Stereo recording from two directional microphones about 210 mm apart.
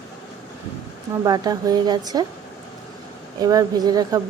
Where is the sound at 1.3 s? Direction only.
20° right (ahead or behind).